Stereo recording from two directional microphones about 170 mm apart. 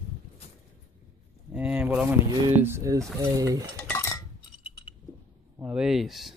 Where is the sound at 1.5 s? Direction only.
10° right (ahead or behind).